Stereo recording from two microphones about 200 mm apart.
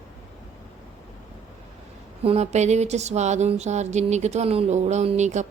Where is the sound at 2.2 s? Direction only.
35° right (ahead or behind).